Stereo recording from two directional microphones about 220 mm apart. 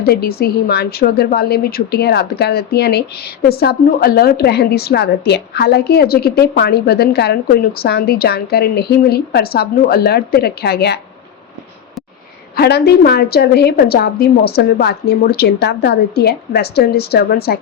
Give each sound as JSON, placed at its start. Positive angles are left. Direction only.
{"t": 0.1, "sound": "a woman's voice", "side_deg": 45}
{"t": 12.5, "sound": "a woman's voice", "side_deg": 45}